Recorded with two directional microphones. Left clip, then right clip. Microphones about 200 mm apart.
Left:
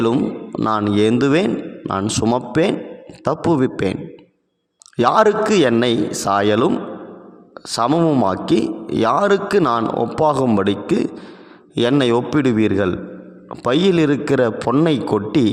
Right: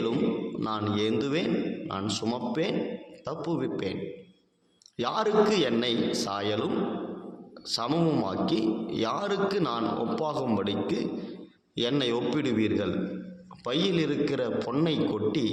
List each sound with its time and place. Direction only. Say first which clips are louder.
0.6 s a man's voice: left 14 dB; 50° left (ahead or behind)
4.9 s a man's voice: left 11 dB; 55° left (ahead or behind)
7.7 s a man's voice: left 11 dB; 50° left (ahead or behind)